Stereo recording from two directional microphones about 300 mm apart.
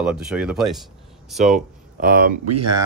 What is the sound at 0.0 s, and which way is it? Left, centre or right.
Speech, centre.